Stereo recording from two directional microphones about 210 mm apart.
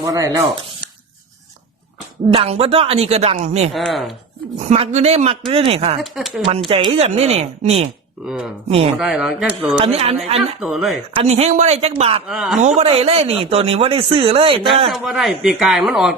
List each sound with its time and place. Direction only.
0.0 s speech: 15° right (ahead or behind)
2.3 s speech: 25° right (ahead or behind)
3.7 s speech: centre (ahead or behind)
4.6 s a man's voice: 30° right (ahead or behind)
6.0 s speech: centre (ahead or behind)
6.7 s speech: 25° right (ahead or behind)
8.3 s speech: centre (ahead or behind)
9.7 s speech: 25° right (ahead or behind)
10.6 s speech: centre (ahead or behind)
11.3 s a man's voice: 30° right (ahead or behind)
12.3 s speech: centre (ahead or behind)
12.5 s speech: 30° right (ahead or behind)
14.8 s speech: centre (ahead or behind)